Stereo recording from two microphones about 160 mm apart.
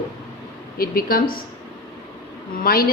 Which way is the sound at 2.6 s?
70° left (ahead or behind).